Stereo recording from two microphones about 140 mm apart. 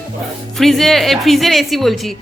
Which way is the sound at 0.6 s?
Centre (ahead or behind).